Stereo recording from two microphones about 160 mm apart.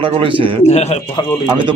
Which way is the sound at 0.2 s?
35° right (ahead or behind).